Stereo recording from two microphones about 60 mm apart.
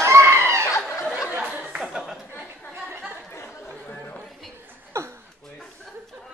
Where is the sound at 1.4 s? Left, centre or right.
Right.